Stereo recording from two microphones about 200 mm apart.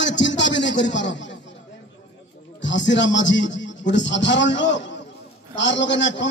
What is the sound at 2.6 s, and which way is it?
A man's voice, 65° left (ahead or behind).